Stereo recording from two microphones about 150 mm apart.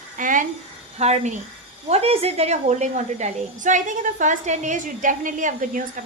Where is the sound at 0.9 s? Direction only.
50° right (ahead or behind).